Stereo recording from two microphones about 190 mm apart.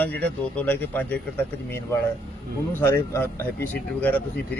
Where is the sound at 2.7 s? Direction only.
10° left (ahead or behind).